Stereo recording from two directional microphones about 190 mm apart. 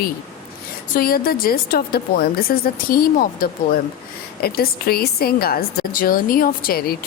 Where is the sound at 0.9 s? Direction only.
50° left (ahead or behind).